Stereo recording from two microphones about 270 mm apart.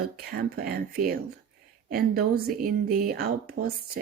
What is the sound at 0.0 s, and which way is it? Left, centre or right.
A woman's voice, right.